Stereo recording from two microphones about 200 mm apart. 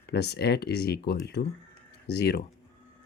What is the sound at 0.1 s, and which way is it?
Speech, 55° left (ahead or behind).